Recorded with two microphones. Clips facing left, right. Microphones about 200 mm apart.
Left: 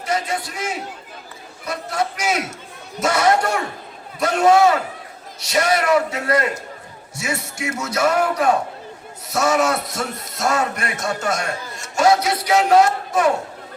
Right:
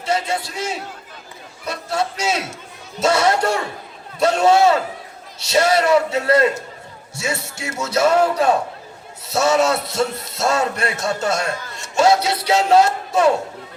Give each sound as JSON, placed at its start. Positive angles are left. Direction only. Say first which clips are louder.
{"t": 0.0, "sound": "a man's voice", "louder": "right 2 dB", "side_deg": -25}